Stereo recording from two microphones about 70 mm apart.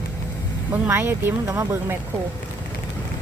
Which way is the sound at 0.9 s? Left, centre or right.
Right.